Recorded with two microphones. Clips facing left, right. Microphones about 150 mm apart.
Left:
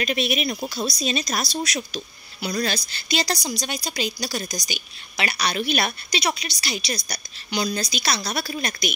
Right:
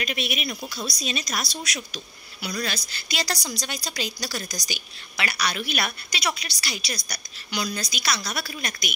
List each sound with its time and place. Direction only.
0.0 s a woman's voice: 30° left (ahead or behind)